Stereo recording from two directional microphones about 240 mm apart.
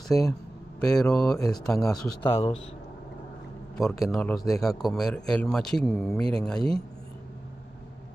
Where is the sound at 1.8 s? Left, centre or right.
Left.